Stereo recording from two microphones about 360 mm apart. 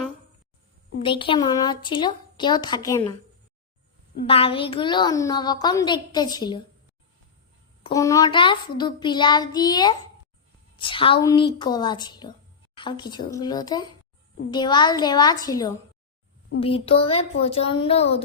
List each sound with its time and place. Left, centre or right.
0.9 s a child's voice: centre
7.9 s a child's voice: centre